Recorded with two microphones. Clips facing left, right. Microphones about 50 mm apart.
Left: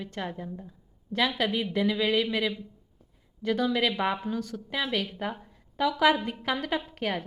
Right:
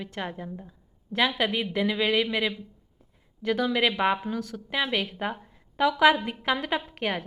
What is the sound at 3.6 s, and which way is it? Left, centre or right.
Speech, right.